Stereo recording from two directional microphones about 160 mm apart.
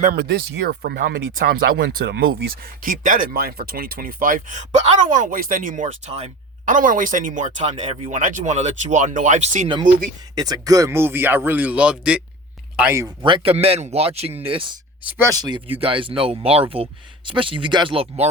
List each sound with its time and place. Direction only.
0.0 s speech: 70° right (ahead or behind); by 2.3 s 90° right
2.8 s speech: 60° right (ahead or behind); by 6.7 s 40° right (ahead or behind)
6.7 s speech: 55° right (ahead or behind)
10.3 s speech: 25° right (ahead or behind)
13.2 s speech: 35° right (ahead or behind)
15.0 s speech: 20° right (ahead or behind); by 18.3 s 35° right (ahead or behind)